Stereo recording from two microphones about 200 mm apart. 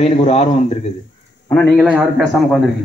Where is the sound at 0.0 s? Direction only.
30° left (ahead or behind).